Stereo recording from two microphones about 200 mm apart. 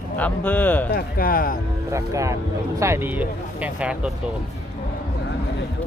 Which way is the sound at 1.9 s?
15° right (ahead or behind).